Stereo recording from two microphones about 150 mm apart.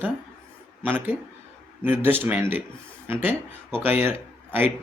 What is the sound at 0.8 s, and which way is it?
Speech, 15° right (ahead or behind).